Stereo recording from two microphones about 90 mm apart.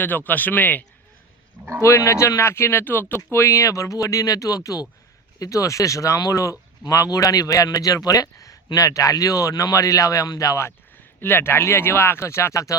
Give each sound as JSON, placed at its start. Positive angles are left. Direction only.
{"t": 0.0, "sound": "speech", "side_deg": 20}
{"t": 1.8, "sound": "speech", "side_deg": 35}